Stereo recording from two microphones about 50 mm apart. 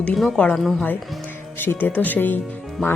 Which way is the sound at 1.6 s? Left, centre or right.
Left.